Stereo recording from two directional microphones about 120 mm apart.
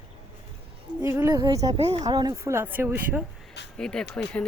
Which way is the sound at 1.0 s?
25° right (ahead or behind).